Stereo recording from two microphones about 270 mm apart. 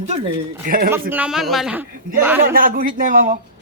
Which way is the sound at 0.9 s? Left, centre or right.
Centre.